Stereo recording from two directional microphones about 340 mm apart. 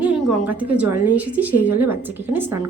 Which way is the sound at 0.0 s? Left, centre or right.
Centre.